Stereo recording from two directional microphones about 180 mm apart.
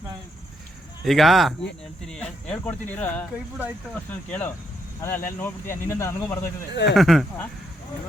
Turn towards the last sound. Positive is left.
turn(degrees=0)  # may be behind; listen again after turning